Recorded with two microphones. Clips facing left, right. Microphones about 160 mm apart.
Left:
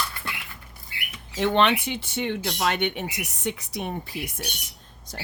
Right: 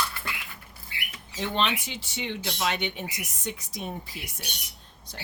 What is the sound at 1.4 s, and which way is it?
Speech, 65° left (ahead or behind).